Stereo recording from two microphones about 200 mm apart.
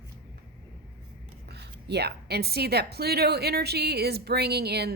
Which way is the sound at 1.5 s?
55° right (ahead or behind).